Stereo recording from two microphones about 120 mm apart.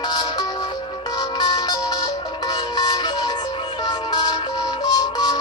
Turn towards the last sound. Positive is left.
turn(degrees=35)  # may be behind; listen again after turning